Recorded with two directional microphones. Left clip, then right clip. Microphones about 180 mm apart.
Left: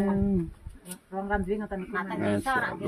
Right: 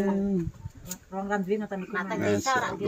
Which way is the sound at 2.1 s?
5° left (ahead or behind).